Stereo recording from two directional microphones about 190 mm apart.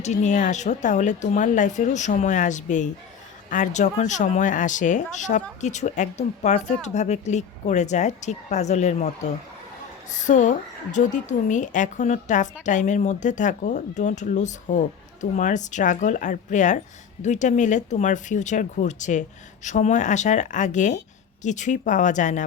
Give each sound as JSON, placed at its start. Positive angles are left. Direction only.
{"t": 0.0, "sound": "speech", "side_deg": 40}